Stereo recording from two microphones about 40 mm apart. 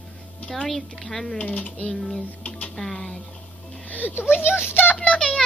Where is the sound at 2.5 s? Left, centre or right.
Left.